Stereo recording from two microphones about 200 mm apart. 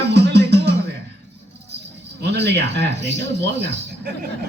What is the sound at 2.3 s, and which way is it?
Speech, 55° right (ahead or behind).